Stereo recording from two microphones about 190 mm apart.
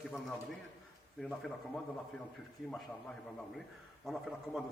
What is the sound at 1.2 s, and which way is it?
Speech, centre (ahead or behind).